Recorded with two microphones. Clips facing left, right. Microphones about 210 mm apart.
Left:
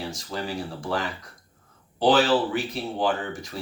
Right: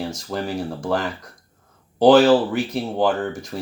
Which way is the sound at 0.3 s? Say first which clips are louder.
Right 5 dB; 50° right (ahead or behind).